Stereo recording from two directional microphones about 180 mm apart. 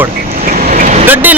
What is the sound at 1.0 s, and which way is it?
Speech, 10° right (ahead or behind).